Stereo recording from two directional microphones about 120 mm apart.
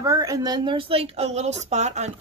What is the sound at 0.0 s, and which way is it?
A woman's voice, 30° right (ahead or behind).